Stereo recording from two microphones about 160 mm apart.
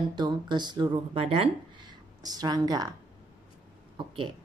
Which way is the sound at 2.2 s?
25° right (ahead or behind).